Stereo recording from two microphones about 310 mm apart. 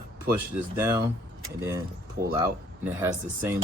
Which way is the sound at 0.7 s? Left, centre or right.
Centre.